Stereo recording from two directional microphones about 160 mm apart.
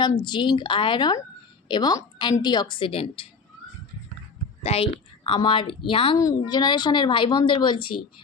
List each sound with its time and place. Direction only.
0.2 s a woman's voice: 30° left (ahead or behind)
4.6 s a woman's voice: 40° left (ahead or behind)
6.1 s a woman's voice: 20° left (ahead or behind)